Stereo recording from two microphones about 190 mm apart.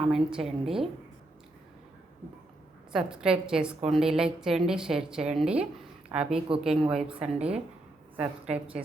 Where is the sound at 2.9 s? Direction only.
5° right (ahead or behind).